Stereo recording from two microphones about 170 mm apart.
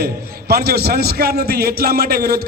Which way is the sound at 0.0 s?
65° right (ahead or behind).